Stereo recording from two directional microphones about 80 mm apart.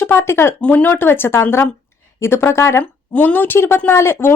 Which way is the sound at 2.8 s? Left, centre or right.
Left.